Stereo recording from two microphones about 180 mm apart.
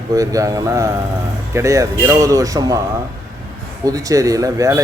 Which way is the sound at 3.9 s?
20° right (ahead or behind).